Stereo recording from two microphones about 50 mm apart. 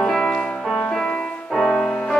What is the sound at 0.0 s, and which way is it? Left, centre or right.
Music, centre.